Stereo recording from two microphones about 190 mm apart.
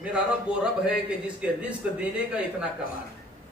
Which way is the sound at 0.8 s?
5° right (ahead or behind).